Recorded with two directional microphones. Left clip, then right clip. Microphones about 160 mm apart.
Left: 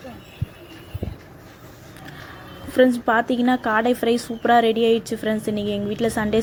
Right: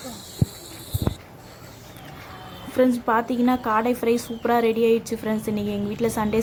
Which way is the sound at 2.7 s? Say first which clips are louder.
Left 3 dB; 10° left (ahead or behind).